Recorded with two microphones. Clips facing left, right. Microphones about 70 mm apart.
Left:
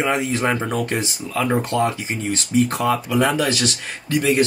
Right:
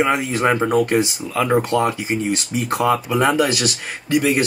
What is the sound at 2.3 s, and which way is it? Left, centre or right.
Speech, centre.